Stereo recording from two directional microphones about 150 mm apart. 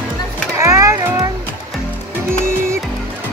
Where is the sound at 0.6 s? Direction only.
20° right (ahead or behind).